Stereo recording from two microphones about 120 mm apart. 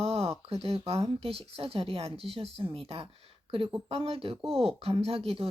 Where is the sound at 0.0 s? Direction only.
55° right (ahead or behind).